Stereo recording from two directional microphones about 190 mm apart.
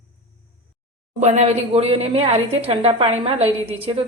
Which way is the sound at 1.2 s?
35° right (ahead or behind).